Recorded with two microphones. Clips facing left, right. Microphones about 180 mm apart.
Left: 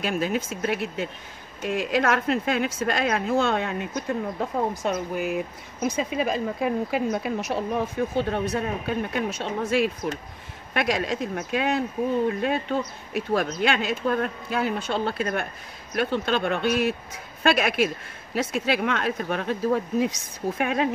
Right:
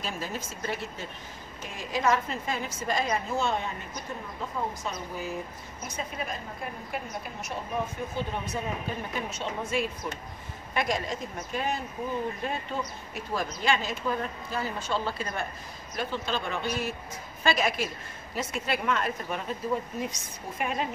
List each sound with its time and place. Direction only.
0.0 s speech: 65° left (ahead or behind)
4.8 s speech: 70° left (ahead or behind); by 20.9 s 85° left